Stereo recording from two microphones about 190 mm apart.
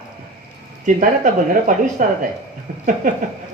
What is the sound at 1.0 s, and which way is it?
Speech, 45° right (ahead or behind).